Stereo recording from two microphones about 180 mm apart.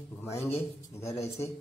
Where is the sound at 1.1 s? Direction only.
35° left (ahead or behind).